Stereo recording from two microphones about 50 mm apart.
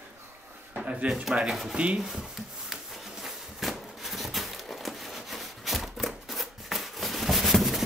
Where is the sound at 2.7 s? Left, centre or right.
Centre.